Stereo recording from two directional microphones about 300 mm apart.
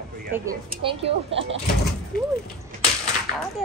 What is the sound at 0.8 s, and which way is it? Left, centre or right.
Speech, centre.